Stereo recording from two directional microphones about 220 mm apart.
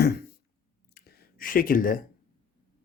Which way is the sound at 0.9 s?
40° left (ahead or behind).